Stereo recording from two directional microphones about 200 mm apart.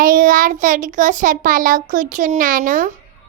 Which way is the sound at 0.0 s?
40° right (ahead or behind).